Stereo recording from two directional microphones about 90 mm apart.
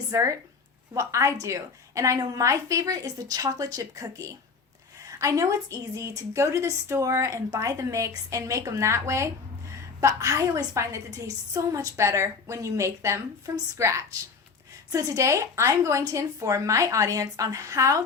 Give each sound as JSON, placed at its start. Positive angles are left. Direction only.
{"t": 0.1, "sound": "a woman's voice", "side_deg": -35}